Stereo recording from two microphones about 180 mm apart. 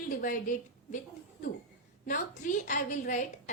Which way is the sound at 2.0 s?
45° left (ahead or behind).